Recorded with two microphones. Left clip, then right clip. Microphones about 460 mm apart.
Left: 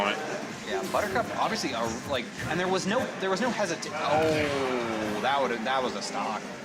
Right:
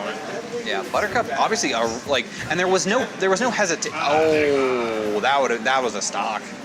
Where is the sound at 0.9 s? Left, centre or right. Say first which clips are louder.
Right 6 dB; right.